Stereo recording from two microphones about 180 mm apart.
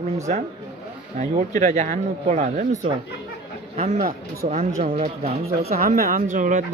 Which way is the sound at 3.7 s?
35° right (ahead or behind).